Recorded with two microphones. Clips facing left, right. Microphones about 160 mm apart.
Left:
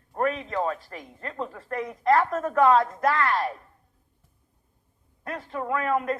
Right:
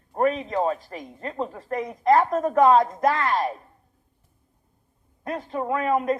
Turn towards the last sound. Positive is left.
turn(degrees=-15)  # may be behind; listen again after turning